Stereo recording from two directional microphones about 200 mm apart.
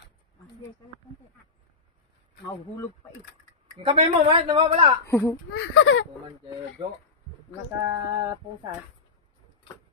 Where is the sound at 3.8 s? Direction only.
30° right (ahead or behind).